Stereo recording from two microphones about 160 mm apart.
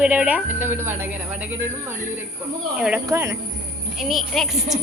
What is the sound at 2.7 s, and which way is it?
Speech, 5° right (ahead or behind).